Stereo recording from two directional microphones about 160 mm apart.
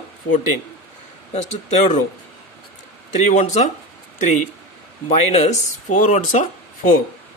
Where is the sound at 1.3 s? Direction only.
45° left (ahead or behind).